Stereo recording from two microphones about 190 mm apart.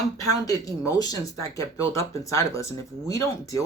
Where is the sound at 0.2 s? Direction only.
20° left (ahead or behind).